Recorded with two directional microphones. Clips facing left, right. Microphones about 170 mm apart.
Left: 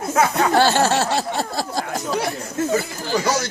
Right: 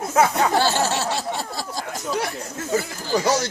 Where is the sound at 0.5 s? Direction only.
65° left (ahead or behind).